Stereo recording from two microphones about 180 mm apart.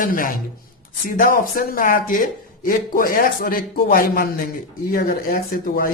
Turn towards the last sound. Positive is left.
turn(degrees=50)  # may be behind; listen again after turning